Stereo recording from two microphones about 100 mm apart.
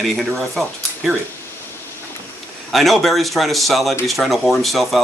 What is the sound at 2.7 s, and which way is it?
Speech, centre (ahead or behind).